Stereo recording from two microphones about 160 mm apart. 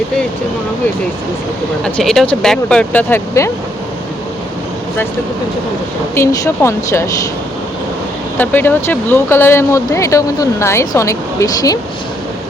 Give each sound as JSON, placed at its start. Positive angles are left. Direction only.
{"t": 1.8, "sound": "speech", "side_deg": 5}
{"t": 6.1, "sound": "speech", "side_deg": 20}
{"t": 8.4, "sound": "speech", "side_deg": 10}